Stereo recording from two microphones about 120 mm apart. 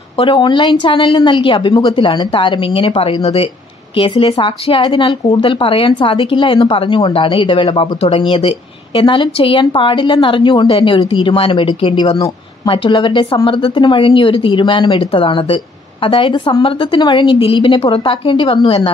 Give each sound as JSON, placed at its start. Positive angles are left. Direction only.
{"t": 0.2, "sound": "speech", "side_deg": 40}
{"t": 3.2, "sound": "speech", "side_deg": 60}
{"t": 3.9, "sound": "speech", "side_deg": 50}